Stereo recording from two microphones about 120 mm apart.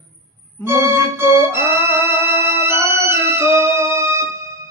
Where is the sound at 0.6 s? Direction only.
20° right (ahead or behind).